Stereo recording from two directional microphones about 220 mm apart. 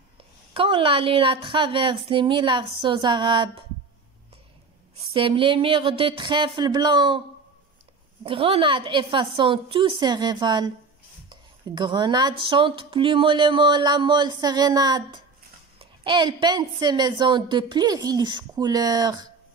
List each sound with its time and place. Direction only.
0.5 s speech: 25° right (ahead or behind)
5.1 s speech: 25° right (ahead or behind)